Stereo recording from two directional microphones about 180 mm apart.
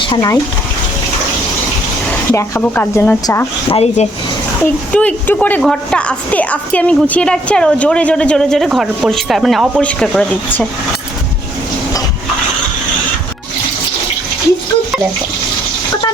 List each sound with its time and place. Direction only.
0.0 s speech: 25° left (ahead or behind)
2.3 s speech: 15° left (ahead or behind)
3.7 s speech: 35° left (ahead or behind)
4.6 s a woman's voice: 5° left (ahead or behind)